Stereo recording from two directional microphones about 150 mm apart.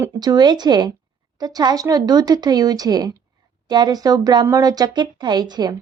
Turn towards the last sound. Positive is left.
turn(degrees=-25)  # may be behind; listen again after turning